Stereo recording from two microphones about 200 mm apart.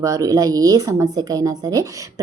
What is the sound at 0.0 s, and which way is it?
A woman's voice, 15° right (ahead or behind).